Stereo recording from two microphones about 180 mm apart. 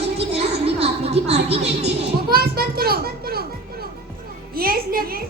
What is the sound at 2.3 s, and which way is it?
A child's voice, 55° right (ahead or behind).